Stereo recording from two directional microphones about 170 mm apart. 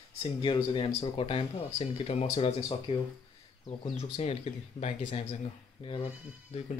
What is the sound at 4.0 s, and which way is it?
Speech, 40° left (ahead or behind).